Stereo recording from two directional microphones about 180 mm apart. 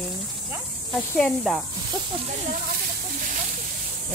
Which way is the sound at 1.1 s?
Centre (ahead or behind).